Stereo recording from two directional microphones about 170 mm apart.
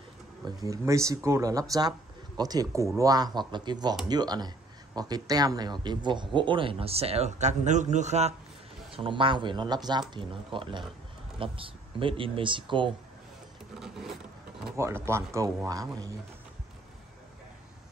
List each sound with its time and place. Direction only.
0.7 s speech: 20° right (ahead or behind)
13.7 s a sound: centre (ahead or behind)
14.8 s speech: 15° right (ahead or behind)